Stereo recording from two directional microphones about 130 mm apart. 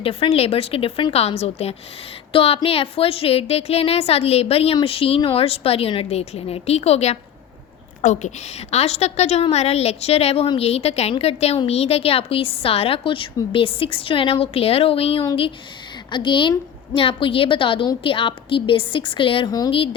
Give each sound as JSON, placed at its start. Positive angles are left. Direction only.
{"t": 0.0, "sound": "a woman's voice", "side_deg": 50}
{"t": 19.5, "sound": "a woman's voice", "side_deg": 30}
{"t": 19.7, "sound": "a woman's voice", "side_deg": 45}